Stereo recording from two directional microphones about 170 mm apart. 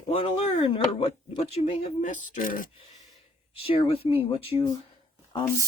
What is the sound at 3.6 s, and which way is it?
Speech, 35° left (ahead or behind).